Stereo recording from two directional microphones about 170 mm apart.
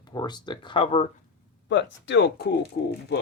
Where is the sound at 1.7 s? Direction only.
90° left.